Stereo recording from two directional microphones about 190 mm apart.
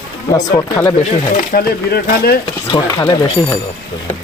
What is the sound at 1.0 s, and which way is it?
Speech, 45° left (ahead or behind).